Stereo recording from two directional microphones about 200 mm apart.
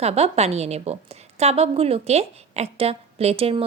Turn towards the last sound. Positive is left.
turn(degrees=-30)  # may be behind; listen again after turning